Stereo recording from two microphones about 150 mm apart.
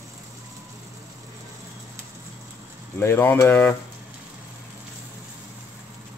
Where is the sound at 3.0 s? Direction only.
15° left (ahead or behind).